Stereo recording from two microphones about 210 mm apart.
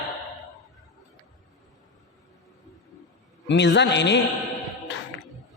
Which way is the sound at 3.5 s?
55° left (ahead or behind).